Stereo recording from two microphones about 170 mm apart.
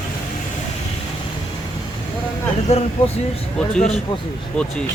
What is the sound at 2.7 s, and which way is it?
Speech, 40° left (ahead or behind).